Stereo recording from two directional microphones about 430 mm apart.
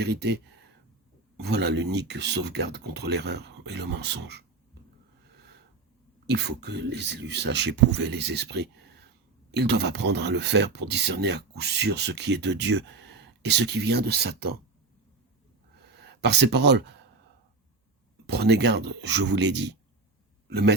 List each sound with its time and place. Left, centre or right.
0.0 s speech: right
1.4 s speech: right
6.2 s speech: right
16.0 s speech: right
18.3 s speech: right